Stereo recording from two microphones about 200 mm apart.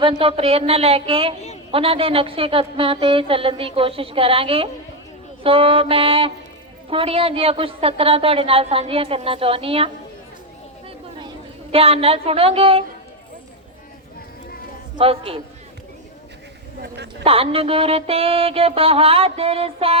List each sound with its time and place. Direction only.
0.0 s a woman's voice: 25° right (ahead or behind)
11.7 s a woman's voice: 30° right (ahead or behind)
14.9 s a woman's voice: 30° right (ahead or behind)
16.8 s speech: 60° right (ahead or behind)
17.2 s a woman's voice: 30° right (ahead or behind)